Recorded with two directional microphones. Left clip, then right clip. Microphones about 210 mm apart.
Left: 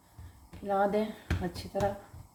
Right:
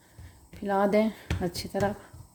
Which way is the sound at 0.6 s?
50° right (ahead or behind).